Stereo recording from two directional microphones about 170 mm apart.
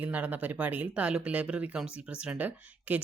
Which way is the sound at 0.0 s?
10° right (ahead or behind).